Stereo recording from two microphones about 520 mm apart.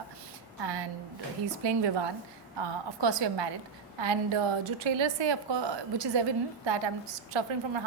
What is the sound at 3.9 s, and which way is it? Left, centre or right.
A woman's voice, right.